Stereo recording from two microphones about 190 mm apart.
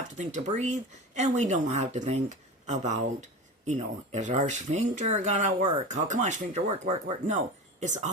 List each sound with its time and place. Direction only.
0.2 s speech: 40° right (ahead or behind)